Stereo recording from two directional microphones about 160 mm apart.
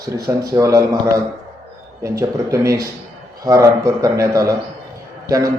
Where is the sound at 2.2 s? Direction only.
20° right (ahead or behind).